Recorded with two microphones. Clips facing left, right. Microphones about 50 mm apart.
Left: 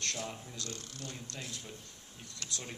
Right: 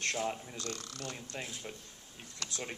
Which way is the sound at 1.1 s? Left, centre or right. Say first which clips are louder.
Right 2 dB; right.